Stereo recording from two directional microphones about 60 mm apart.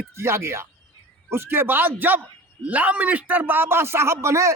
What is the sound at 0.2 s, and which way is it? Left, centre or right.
A man's voice, right.